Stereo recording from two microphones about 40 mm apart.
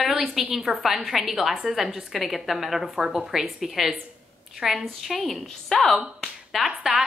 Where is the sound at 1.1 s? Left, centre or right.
Centre.